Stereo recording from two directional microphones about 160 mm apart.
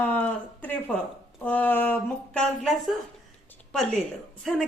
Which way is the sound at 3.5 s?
5° left (ahead or behind).